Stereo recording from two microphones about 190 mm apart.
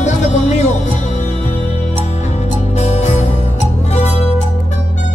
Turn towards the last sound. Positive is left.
turn(degrees=35)  # may be behind; listen again after turning